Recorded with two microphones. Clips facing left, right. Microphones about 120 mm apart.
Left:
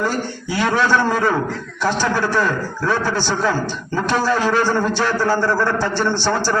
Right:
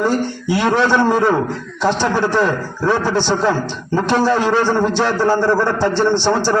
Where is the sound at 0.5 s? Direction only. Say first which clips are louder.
Right 2 dB; 20° right (ahead or behind).